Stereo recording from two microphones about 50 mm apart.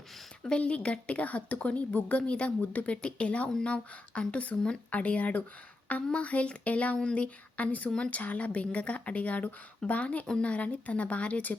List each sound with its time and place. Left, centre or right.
0.4 s a woman's voice: left
7.9 s a woman's voice: centre
8.1 s a woman's voice: left